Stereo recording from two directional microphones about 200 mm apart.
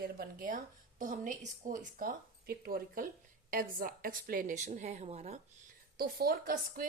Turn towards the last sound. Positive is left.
turn(degrees=-45)  # may be behind; listen again after turning